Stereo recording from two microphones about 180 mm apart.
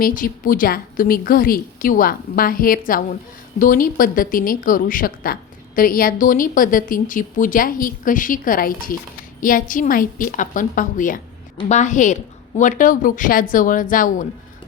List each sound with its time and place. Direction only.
0.0 s a woman's voice: 50° left (ahead or behind)